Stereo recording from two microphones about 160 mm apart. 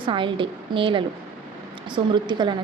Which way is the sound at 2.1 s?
30° right (ahead or behind).